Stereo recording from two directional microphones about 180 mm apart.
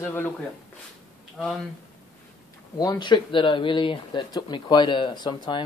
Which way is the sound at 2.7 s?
25° left (ahead or behind).